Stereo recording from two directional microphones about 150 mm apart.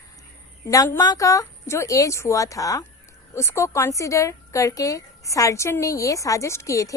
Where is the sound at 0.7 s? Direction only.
20° left (ahead or behind).